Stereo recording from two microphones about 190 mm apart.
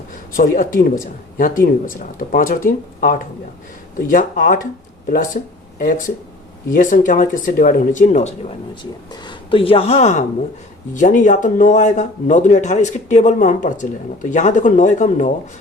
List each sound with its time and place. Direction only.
0.1 s speech: 45° left (ahead or behind)
6.7 s speech: 45° left (ahead or behind)
8.8 s speech: 25° left (ahead or behind)